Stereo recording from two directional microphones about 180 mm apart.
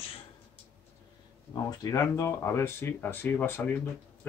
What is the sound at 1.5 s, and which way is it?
Speech, 20° left (ahead or behind).